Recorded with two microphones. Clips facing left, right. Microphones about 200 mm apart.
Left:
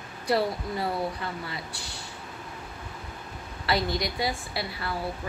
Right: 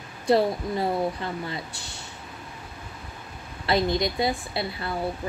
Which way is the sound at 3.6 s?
25° right (ahead or behind).